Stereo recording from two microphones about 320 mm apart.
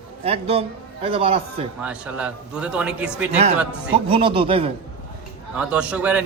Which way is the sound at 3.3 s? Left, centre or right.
Right.